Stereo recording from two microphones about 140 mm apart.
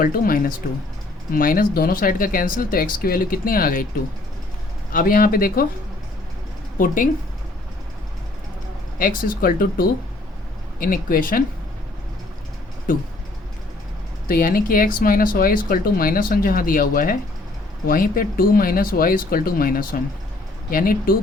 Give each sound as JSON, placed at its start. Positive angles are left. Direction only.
{"t": 0.0, "sound": "speech", "side_deg": 90}
{"t": 4.9, "sound": "speech", "side_deg": 90}
{"t": 6.7, "sound": "speech", "side_deg": 80}
{"t": 9.0, "sound": "speech", "side_deg": 80}
{"t": 14.3, "sound": "speech", "side_deg": 90}